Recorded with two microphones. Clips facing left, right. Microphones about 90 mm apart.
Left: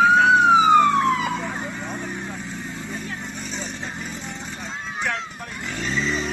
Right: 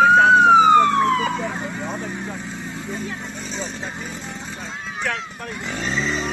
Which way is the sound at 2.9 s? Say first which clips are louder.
Right 3 dB; centre (ahead or behind).